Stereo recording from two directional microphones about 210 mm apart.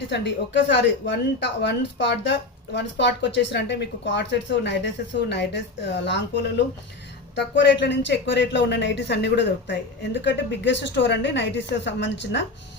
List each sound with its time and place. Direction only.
0.1 s a woman's voice: 55° left (ahead or behind)